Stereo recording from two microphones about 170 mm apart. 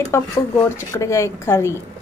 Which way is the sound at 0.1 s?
15° left (ahead or behind).